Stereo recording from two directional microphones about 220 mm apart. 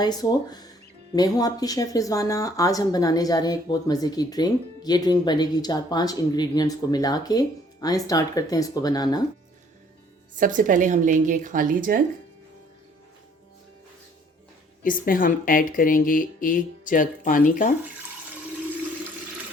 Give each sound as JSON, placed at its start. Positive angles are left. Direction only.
{"t": 0.0, "sound": "speech", "side_deg": 20}
{"t": 10.3, "sound": "a woman's voice", "side_deg": -35}
{"t": 14.8, "sound": "speech", "side_deg": 40}